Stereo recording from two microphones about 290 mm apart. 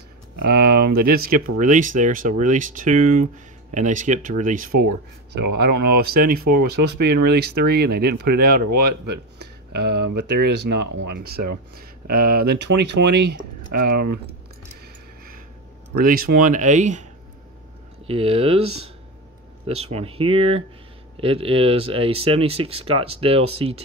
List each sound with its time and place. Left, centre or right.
0.5 s speech: right
9.0 s speech: right
13.0 s speech: right
13.7 s speech: right
16.0 s speech: right
18.0 s speech: centre